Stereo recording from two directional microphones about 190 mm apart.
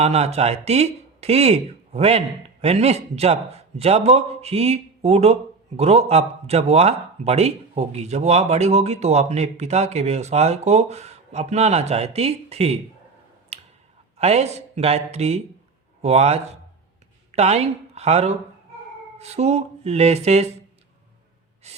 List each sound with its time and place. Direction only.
0.0 s speech: 35° right (ahead or behind)
13.5 s clicking: 35° right (ahead or behind)
14.2 s a woman's voice: 35° right (ahead or behind)
21.6 s gasp: 35° right (ahead or behind)